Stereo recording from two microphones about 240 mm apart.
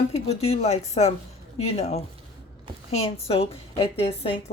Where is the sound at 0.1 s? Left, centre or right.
Left.